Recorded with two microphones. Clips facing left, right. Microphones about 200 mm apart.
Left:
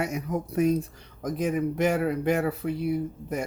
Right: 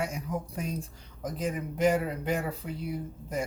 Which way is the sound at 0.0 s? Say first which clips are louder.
Left 4 dB; 65° left (ahead or behind).